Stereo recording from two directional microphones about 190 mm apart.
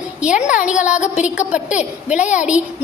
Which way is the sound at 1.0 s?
40° left (ahead or behind).